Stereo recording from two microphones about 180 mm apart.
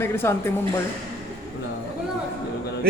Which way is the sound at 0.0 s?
15° left (ahead or behind).